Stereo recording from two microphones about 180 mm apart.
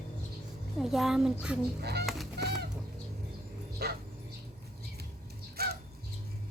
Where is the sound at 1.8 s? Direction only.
65° right (ahead or behind).